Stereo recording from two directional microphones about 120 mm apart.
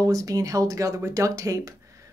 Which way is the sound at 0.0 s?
30° right (ahead or behind).